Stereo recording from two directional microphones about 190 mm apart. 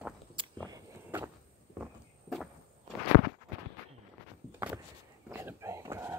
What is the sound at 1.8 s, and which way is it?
Walk, centre (ahead or behind).